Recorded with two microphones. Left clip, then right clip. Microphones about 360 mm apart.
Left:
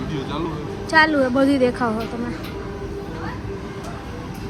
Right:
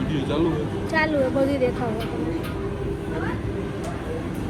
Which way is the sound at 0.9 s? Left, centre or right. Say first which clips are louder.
Left 6 dB; left.